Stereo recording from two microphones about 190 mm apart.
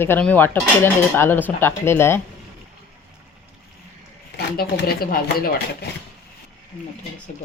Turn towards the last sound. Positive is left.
turn(degrees=50)  # may be behind; listen again after turning